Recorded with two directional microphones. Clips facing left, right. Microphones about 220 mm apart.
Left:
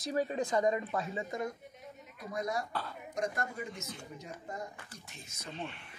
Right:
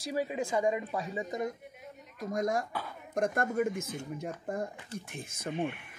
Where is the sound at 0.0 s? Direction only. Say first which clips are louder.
Even; 5° right (ahead or behind).